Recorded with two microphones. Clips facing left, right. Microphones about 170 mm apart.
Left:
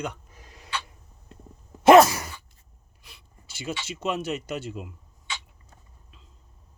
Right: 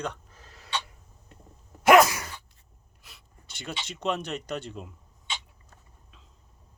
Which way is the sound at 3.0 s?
Centre (ahead or behind).